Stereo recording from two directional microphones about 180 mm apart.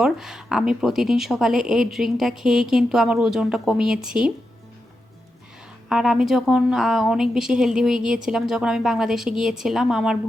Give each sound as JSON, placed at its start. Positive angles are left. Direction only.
{"t": 0.0, "sound": "speech", "side_deg": 0}
{"t": 5.9, "sound": "speech", "side_deg": 0}